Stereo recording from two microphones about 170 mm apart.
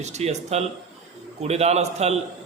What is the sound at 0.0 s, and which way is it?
A man's voice, 40° right (ahead or behind).